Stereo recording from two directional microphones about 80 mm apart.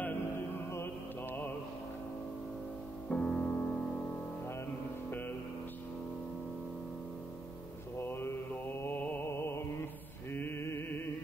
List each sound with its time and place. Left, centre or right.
3.1 s music: centre
8.0 s mantra: left
9.2 s music: left
10.3 s mantra: left